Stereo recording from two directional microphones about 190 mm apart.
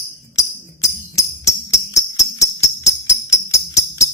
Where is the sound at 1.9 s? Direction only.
15° left (ahead or behind).